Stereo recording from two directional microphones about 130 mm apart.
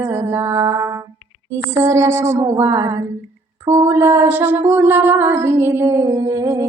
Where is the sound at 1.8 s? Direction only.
25° right (ahead or behind).